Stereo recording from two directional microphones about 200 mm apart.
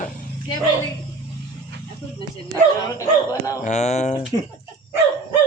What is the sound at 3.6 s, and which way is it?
Speech, 35° left (ahead or behind).